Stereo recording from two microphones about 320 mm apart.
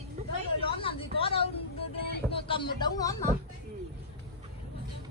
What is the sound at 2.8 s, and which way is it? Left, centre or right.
Speech, centre.